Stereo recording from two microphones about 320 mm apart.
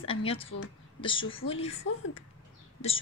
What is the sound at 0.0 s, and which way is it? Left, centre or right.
A woman's voice, centre.